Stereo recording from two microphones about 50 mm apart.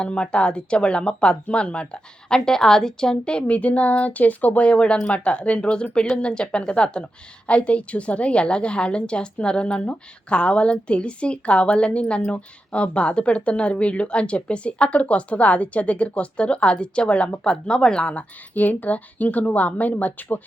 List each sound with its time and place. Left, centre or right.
0.0 s a woman's voice: left
4.7 s a woman's voice: centre
18.1 s a woman's voice: left